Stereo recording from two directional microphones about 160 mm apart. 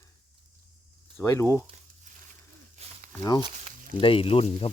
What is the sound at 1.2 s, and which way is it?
Speech, 20° left (ahead or behind).